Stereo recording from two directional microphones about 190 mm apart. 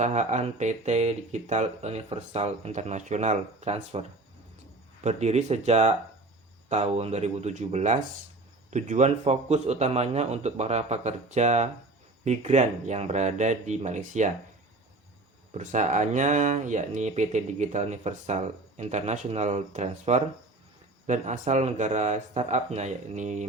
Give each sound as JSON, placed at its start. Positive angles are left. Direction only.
{"t": 0.0, "sound": "speech", "side_deg": -40}
{"t": 5.0, "sound": "speech", "side_deg": -35}
{"t": 15.5, "sound": "speech", "side_deg": -40}